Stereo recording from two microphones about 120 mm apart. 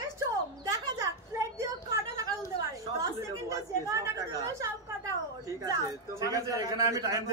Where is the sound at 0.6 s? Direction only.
30° right (ahead or behind).